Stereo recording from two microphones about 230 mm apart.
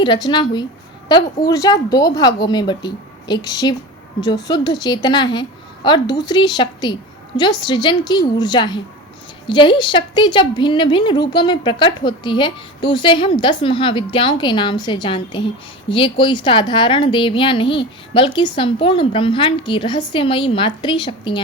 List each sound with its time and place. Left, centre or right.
0.0 s a woman's voice: centre